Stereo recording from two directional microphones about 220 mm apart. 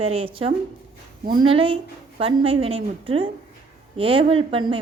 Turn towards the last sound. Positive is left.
turn(degrees=-20)  # may be behind; listen again after turning